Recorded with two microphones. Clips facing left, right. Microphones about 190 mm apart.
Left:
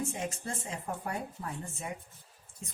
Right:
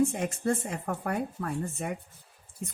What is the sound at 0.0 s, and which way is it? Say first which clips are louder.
Speech: right 9 dB; 60° right (ahead or behind).